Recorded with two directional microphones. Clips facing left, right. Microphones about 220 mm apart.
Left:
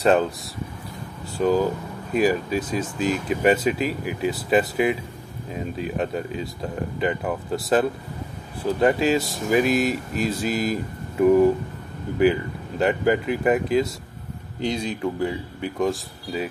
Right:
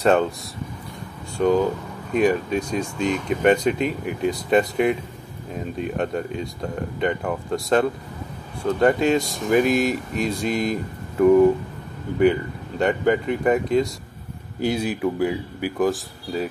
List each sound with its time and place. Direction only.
0.0 s speech: centre (ahead or behind)
1.4 s speech: 5° left (ahead or behind)